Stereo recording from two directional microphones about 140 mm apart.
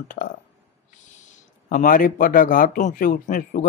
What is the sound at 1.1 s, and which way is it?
Speech, 60° left (ahead or behind).